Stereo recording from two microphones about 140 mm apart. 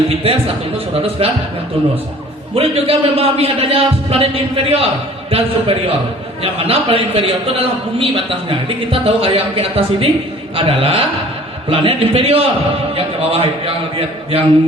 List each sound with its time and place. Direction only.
0.1 s a man's voice: 45° right (ahead or behind)
2.6 s a man's voice: 45° right (ahead or behind)